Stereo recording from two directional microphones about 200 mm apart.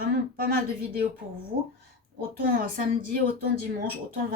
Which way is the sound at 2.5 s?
45° right (ahead or behind).